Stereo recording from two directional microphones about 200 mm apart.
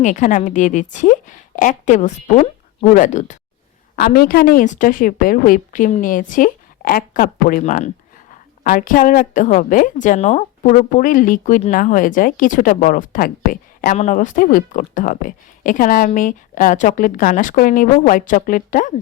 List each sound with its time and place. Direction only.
0.0 s a woman's voice: 40° left (ahead or behind)
3.9 s a woman's voice: 50° left (ahead or behind)